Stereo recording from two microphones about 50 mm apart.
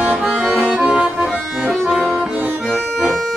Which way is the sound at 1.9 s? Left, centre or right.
Centre.